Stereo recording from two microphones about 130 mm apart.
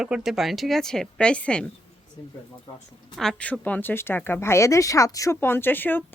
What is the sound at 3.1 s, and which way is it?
A woman's voice, 5° left (ahead or behind).